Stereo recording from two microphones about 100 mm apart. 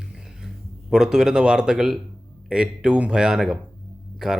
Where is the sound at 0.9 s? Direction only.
5° right (ahead or behind).